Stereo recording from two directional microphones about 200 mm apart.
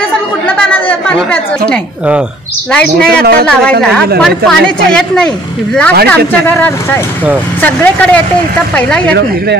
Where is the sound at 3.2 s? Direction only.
50° right (ahead or behind).